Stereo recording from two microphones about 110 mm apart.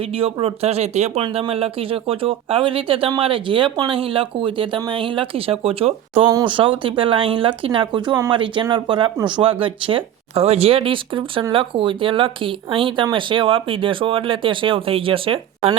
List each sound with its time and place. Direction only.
0.0 s speech: 60° right (ahead or behind); by 1.2 s 75° right (ahead or behind)
1.2 s speech: 60° right (ahead or behind)